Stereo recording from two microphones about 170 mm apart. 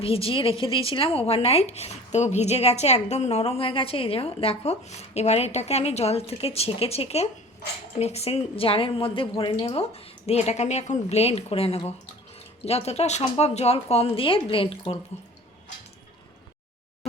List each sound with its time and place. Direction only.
0.0 s speech: 35° left (ahead or behind)